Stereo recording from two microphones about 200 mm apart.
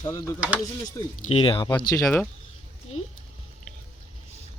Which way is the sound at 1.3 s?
25° left (ahead or behind).